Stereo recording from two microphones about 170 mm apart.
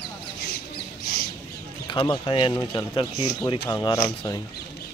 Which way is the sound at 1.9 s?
25° left (ahead or behind).